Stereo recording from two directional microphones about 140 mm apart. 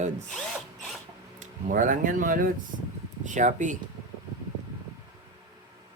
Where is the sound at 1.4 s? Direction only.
70° right (ahead or behind).